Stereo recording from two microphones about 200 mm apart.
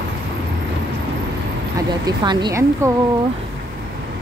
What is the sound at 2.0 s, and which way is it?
Speech, 20° right (ahead or behind).